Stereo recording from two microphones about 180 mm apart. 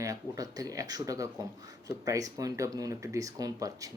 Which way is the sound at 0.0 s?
20° right (ahead or behind).